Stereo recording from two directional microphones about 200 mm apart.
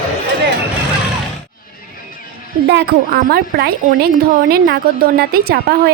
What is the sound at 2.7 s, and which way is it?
A woman's voice, 50° right (ahead or behind).